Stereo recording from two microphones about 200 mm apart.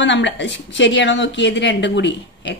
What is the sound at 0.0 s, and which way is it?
A woman's voice, 60° left (ahead or behind).